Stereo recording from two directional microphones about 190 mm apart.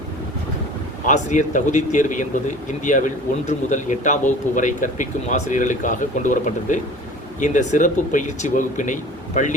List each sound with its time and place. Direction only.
1.0 s speech: 40° left (ahead or behind)